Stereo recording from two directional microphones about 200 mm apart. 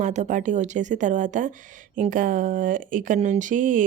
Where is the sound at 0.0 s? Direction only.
35° right (ahead or behind).